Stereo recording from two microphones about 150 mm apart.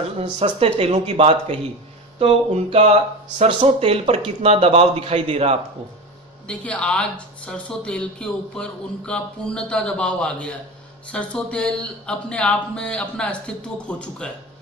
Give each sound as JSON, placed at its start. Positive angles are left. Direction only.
{"t": 0.2, "sound": "speech", "side_deg": -40}
{"t": 6.4, "sound": "speech", "side_deg": 5}